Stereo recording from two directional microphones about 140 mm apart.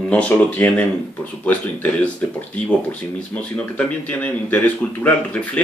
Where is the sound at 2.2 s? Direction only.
10° left (ahead or behind).